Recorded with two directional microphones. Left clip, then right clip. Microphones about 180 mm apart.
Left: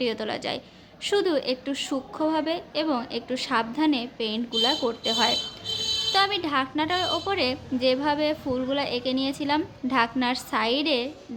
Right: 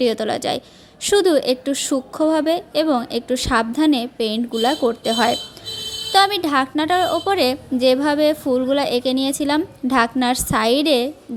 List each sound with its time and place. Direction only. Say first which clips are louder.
0.0 s a woman's voice: right 8 dB; 35° right (ahead or behind)